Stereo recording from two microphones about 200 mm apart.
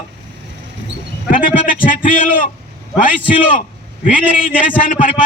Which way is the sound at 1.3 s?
45° left (ahead or behind).